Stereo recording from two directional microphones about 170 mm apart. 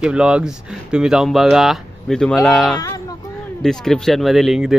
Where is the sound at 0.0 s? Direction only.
5° right (ahead or behind).